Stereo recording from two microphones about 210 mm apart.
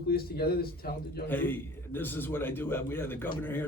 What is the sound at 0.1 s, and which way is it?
A man's voice, 45° left (ahead or behind).